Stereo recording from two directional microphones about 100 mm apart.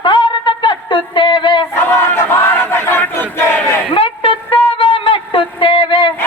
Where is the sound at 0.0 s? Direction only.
55° left (ahead or behind).